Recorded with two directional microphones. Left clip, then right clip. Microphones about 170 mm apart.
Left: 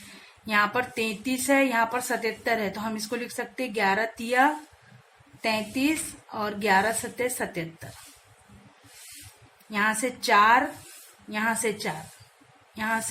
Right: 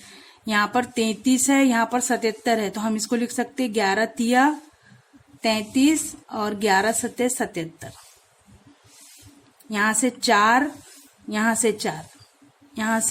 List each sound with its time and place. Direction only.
0.4 s speech: 35° right (ahead or behind)
9.7 s speech: 40° right (ahead or behind)